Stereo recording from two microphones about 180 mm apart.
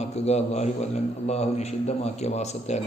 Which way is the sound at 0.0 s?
35° left (ahead or behind).